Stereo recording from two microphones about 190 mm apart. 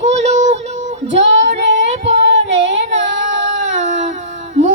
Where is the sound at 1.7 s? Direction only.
70° right (ahead or behind).